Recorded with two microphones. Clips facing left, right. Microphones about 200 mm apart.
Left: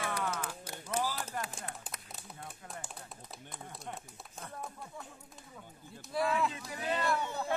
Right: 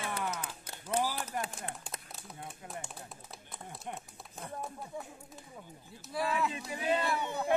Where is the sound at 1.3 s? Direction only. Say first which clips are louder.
Right 2 dB; 30° right (ahead or behind).